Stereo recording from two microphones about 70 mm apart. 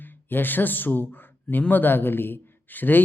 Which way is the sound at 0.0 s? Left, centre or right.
Left.